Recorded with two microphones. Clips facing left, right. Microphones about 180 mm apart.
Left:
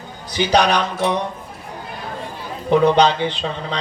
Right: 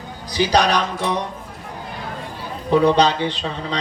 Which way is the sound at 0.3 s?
35° right (ahead or behind).